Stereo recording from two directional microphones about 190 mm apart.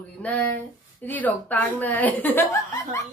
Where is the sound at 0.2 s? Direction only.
5° left (ahead or behind).